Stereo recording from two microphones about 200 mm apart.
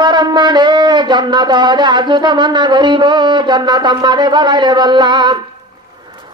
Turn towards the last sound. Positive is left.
turn(degrees=-20)  # may be behind; listen again after turning